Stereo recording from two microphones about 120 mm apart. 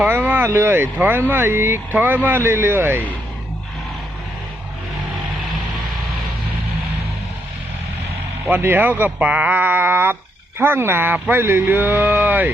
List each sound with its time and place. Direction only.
0.0 s speech: 15° right (ahead or behind)
8.4 s speech: 15° right (ahead or behind)